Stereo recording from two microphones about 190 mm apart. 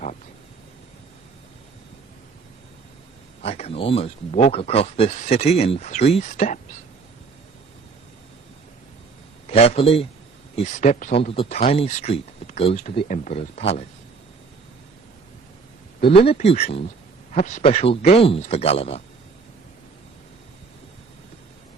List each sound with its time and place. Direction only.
3.4 s speech: 30° left (ahead or behind)
9.5 s a man's voice: 30° left (ahead or behind)
16.0 s speech: 30° left (ahead or behind)